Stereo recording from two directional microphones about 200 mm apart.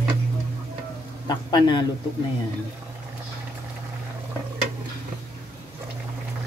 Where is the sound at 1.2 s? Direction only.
20° left (ahead or behind).